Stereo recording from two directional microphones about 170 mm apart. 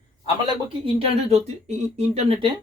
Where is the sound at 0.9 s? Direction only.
35° right (ahead or behind).